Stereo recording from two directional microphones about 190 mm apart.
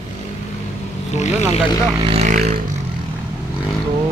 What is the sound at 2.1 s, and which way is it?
Vehicle, 35° right (ahead or behind).